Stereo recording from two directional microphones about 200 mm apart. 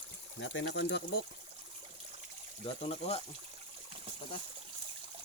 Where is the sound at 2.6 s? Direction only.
30° left (ahead or behind).